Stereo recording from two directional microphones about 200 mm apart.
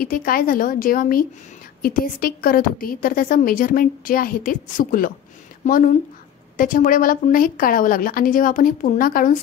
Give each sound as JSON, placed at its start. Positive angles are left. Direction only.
{"t": 0.0, "sound": "a woman's voice", "side_deg": 45}